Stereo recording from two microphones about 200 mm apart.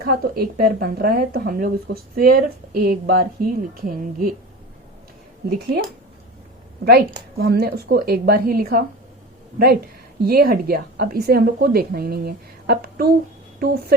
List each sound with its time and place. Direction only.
0.0 s a woman's voice: 50° right (ahead or behind)
6.8 s a woman's voice: 50° right (ahead or behind)